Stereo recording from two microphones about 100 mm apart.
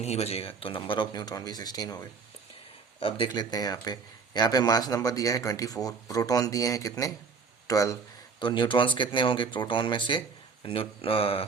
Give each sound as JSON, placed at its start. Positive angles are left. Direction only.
{"t": 0.0, "sound": "speech", "side_deg": 90}
{"t": 3.0, "sound": "speech", "side_deg": 55}
{"t": 3.5, "sound": "speech", "side_deg": 40}
{"t": 8.4, "sound": "speech", "side_deg": 50}